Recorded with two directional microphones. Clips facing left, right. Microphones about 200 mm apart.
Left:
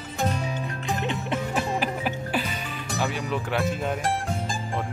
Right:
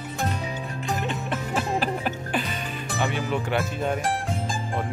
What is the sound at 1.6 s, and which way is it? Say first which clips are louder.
Music: right 1 dB; 10° left (ahead or behind).